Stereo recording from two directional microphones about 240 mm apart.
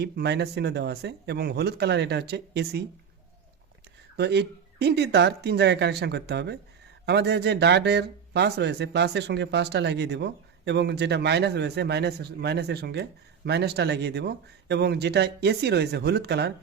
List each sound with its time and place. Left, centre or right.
0.0 s speech: right
4.2 s speech: right